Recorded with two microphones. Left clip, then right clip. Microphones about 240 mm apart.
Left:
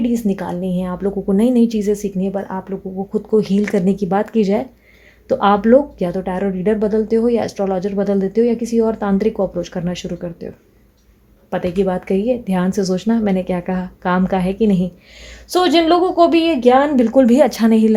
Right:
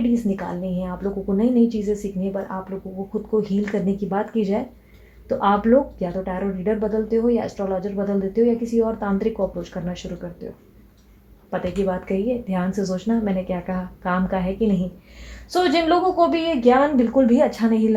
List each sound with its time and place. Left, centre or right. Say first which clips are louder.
0.1 s speech: left 4 dB; left
11.9 s speech: left 5 dB; left
15.4 s speech: left 5 dB; left